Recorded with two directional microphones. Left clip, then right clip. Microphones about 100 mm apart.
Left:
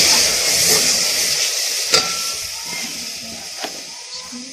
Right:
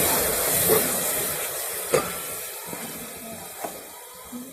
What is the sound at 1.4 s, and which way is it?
Stir, 5° left (ahead or behind).